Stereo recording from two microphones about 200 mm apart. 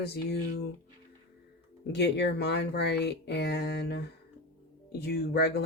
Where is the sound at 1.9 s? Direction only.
60° left (ahead or behind).